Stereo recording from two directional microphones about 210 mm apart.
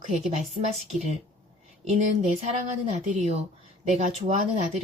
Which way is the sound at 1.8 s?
30° right (ahead or behind).